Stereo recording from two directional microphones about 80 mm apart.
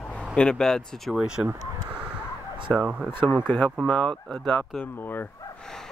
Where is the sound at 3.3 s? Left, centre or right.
Centre.